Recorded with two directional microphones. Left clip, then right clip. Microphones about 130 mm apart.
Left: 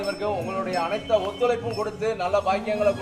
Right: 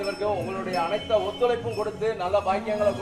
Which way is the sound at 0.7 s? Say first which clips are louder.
Even; 35° left (ahead or behind).